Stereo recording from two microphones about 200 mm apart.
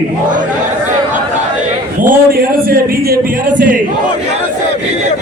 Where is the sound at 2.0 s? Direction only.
45° right (ahead or behind).